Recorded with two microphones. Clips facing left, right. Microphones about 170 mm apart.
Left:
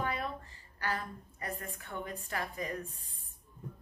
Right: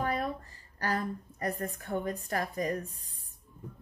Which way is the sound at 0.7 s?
40° right (ahead or behind).